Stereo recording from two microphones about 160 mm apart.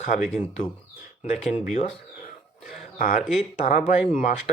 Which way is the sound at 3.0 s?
55° left (ahead or behind).